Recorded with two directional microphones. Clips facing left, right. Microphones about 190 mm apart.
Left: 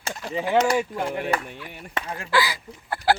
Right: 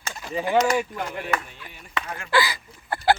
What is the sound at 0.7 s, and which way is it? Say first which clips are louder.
Speech: left 1 dB; 30° left (ahead or behind).